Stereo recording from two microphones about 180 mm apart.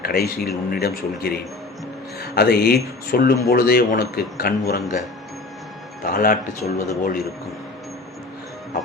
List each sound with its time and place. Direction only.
0.0 s speech: 60° left (ahead or behind)
6.1 s speech: 50° left (ahead or behind)